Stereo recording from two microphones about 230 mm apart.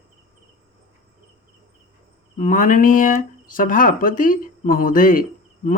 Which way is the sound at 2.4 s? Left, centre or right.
Left.